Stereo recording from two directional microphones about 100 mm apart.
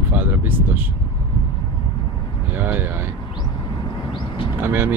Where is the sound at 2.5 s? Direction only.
20° right (ahead or behind).